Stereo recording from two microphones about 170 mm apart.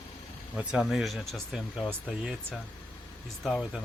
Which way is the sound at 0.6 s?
5° right (ahead or behind).